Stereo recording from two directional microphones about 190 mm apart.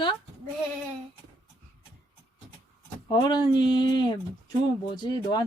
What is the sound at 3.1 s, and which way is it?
Speech, 25° left (ahead or behind).